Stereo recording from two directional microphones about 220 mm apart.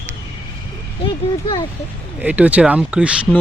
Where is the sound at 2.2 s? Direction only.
5° right (ahead or behind).